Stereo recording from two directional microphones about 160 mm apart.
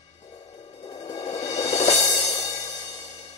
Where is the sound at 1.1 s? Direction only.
40° left (ahead or behind).